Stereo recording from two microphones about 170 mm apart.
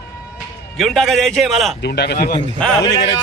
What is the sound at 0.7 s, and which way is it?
A man's voice, centre (ahead or behind).